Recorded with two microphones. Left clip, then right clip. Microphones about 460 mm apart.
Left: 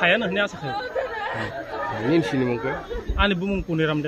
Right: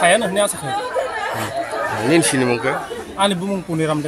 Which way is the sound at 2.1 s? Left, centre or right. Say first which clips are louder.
Right 6 dB; left.